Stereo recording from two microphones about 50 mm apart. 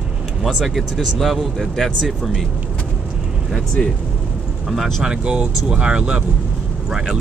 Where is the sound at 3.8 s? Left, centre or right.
Centre.